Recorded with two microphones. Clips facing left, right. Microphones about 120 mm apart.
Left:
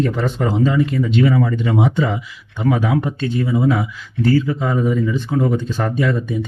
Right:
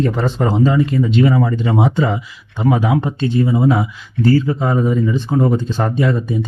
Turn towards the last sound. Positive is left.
turn(degrees=-30)  # may be behind; listen again after turning